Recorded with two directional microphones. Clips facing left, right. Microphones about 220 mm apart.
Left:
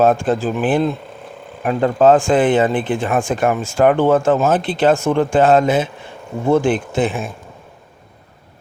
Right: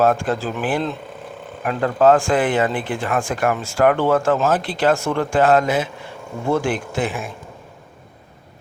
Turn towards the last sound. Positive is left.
turn(degrees=25)  # may be behind; listen again after turning